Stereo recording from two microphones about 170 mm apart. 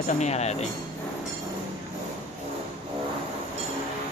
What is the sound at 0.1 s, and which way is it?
Speech, 40° left (ahead or behind).